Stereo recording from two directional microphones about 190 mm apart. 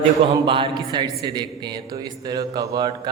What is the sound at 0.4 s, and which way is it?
A man's voice, 25° right (ahead or behind).